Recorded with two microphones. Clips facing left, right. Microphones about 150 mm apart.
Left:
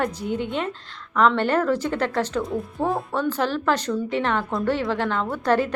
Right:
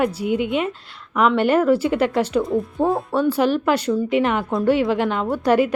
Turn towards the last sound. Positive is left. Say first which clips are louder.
# right 4 dB
turn(degrees=-10)  # may be behind; listen again after turning